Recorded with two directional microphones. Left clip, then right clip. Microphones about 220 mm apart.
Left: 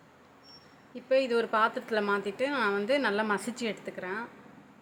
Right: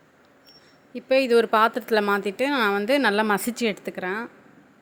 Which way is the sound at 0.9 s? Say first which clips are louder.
Right 7 dB; 40° right (ahead or behind).